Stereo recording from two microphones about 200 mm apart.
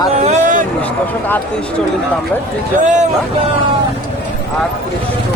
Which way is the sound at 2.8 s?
35° right (ahead or behind).